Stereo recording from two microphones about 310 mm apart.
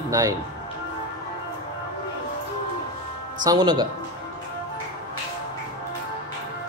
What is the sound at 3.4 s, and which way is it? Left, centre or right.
Speech, centre.